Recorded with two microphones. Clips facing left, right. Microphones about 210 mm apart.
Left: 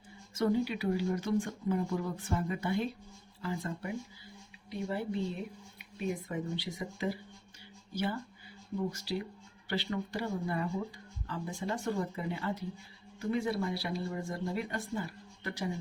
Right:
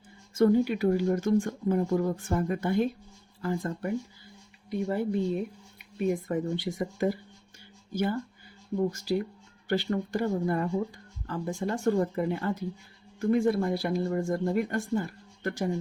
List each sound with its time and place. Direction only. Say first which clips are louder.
0.3 s speech: right 7 dB; 50° right (ahead or behind)
8.9 s speech: right 8 dB; 45° right (ahead or behind)